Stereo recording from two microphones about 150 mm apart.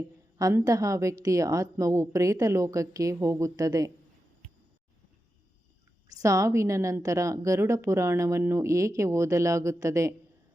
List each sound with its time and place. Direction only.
0.3 s a woman's voice: 25° right (ahead or behind)
6.1 s a woman's voice: 20° right (ahead or behind)